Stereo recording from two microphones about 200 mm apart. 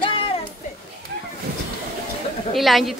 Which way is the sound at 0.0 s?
25° left (ahead or behind).